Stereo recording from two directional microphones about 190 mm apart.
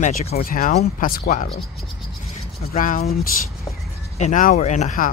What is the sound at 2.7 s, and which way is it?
Speech, 45° left (ahead or behind).